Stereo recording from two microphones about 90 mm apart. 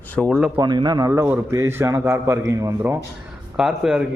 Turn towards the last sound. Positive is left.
turn(degrees=-5)  # may be behind; listen again after turning